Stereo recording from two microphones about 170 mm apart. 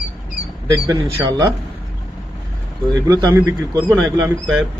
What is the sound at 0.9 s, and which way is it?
Speech, 20° right (ahead or behind).